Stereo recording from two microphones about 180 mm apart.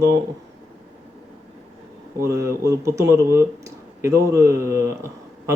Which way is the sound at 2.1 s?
15° right (ahead or behind).